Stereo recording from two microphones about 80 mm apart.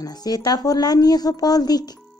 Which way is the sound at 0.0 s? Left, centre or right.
Left.